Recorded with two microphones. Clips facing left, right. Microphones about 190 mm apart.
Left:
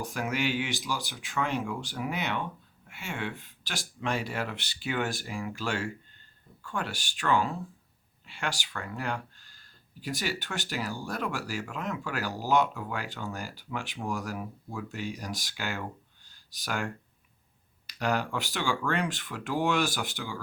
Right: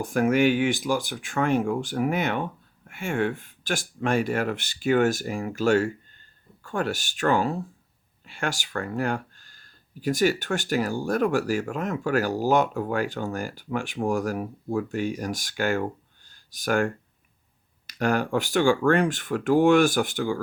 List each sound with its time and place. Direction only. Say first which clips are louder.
0.0 s speech: right 10 dB; 50° right (ahead or behind)